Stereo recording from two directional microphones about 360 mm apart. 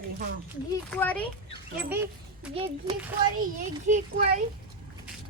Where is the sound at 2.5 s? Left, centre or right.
Centre.